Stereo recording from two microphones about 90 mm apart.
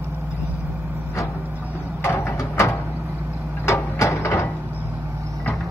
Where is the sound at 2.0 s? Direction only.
35° left (ahead or behind).